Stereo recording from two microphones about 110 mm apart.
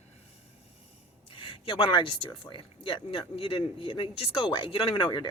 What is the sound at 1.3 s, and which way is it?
Speech, 50° left (ahead or behind).